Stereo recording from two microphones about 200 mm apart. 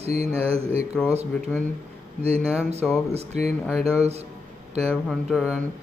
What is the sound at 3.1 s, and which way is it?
Speech, 30° right (ahead or behind).